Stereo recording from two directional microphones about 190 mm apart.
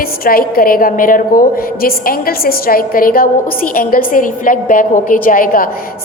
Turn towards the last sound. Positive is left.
turn(degrees=45)  # may be behind; listen again after turning